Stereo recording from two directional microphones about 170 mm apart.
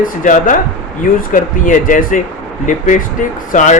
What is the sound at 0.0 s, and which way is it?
A man's voice, 50° left (ahead or behind).